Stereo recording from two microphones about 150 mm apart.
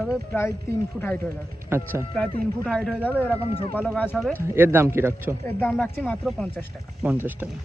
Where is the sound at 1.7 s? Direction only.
15° right (ahead or behind).